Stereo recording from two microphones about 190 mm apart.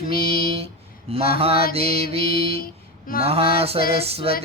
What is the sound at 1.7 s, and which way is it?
Female singing, 30° right (ahead or behind).